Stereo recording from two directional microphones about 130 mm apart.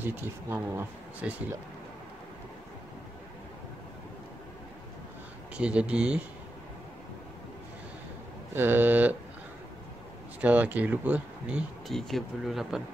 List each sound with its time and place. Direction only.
0.0 s speech: 15° right (ahead or behind)
5.6 s speech: 10° right (ahead or behind)
8.5 s speech: 15° right (ahead or behind)
10.4 s speech: 10° right (ahead or behind)
11.9 s speech: centre (ahead or behind)